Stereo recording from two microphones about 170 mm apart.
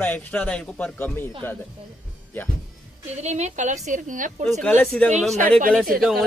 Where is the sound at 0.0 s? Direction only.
10° left (ahead or behind).